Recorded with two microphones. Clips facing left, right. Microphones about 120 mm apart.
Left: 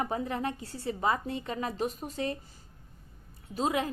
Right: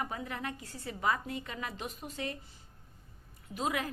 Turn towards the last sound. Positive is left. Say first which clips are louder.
# left 5 dB
turn(degrees=30)  # may be behind; listen again after turning